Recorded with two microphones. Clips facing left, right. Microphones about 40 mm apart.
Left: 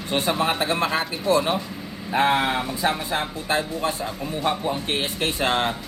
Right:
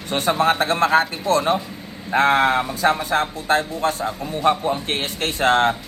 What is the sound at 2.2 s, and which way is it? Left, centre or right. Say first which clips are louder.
Speech: right 4 dB; right.